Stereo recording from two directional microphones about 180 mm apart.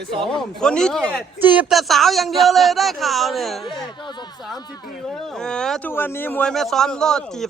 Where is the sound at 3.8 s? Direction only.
25° left (ahead or behind).